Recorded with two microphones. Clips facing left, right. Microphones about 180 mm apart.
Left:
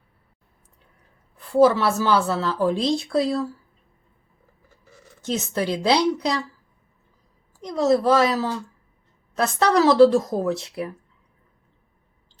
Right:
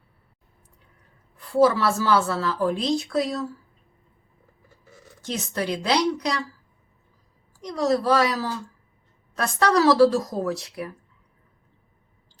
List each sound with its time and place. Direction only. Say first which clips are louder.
1.6 s speech: left 2 dB; 20° left (ahead or behind)
5.2 s speech: left 3 dB; 25° left (ahead or behind)
7.8 s speech: left 3 dB; 25° left (ahead or behind)